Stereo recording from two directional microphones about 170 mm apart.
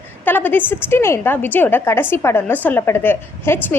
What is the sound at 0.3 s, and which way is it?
A woman's voice, 10° left (ahead or behind).